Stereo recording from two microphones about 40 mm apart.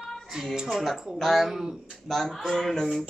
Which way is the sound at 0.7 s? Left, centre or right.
Centre.